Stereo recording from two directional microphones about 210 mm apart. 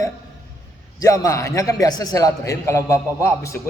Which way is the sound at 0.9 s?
15° left (ahead or behind).